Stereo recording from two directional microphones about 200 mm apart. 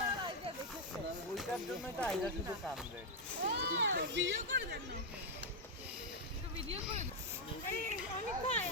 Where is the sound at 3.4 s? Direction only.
60° right (ahead or behind).